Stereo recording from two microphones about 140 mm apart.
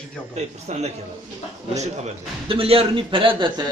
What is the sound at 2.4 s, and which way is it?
A man's voice, 40° right (ahead or behind).